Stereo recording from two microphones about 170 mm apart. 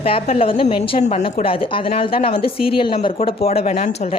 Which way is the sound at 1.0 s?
40° left (ahead or behind).